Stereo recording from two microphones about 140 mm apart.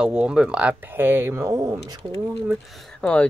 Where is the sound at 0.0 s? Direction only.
5° right (ahead or behind); by 2.0 s 20° right (ahead or behind).